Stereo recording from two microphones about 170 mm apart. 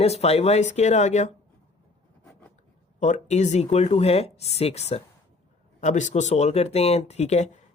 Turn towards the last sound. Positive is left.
turn(degrees=40)  # may be behind; listen again after turning